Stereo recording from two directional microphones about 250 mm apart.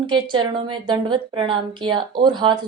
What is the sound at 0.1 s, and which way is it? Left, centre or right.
A woman's voice, centre.